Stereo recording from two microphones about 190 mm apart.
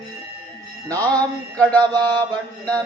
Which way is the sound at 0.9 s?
10° left (ahead or behind).